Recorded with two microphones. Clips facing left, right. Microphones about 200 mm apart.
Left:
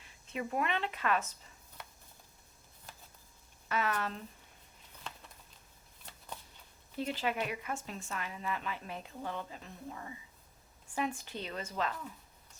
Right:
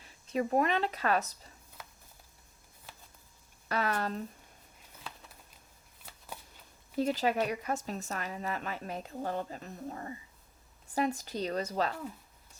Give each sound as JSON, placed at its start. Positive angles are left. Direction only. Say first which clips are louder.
{"t": 0.0, "sound": "a woman's voice", "louder": "right 7 dB", "side_deg": -40}
{"t": 3.7, "sound": "a woman's voice", "louder": "right 2 dB", "side_deg": -40}
{"t": 6.1, "sound": "shuffling cards", "louder": "right 1 dB", "side_deg": -5}
{"t": 7.0, "sound": "a woman's voice", "louder": "right 6 dB", "side_deg": -40}